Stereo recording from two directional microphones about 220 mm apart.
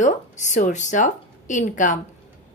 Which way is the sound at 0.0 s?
35° left (ahead or behind).